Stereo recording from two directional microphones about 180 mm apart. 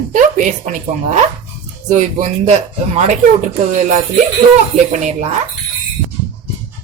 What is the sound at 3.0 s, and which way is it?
A woman's voice, 40° right (ahead or behind).